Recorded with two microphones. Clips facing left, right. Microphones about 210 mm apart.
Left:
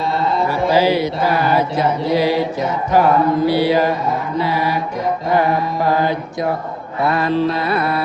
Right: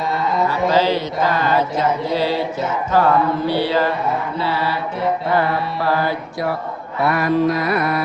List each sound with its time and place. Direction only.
0.4 s mantra: 10° left (ahead or behind); by 8.0 s 30° left (ahead or behind)